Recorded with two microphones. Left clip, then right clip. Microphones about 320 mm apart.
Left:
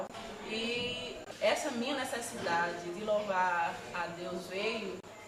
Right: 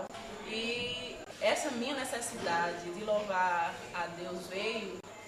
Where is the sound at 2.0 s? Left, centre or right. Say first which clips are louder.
Even; centre.